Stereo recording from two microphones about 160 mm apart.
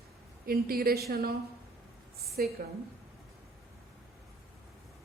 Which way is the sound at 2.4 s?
65° right (ahead or behind).